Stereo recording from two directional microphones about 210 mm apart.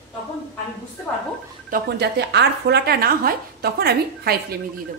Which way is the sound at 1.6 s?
45° right (ahead or behind).